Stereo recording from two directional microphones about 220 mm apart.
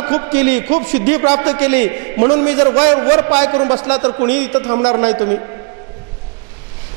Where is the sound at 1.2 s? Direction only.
25° right (ahead or behind).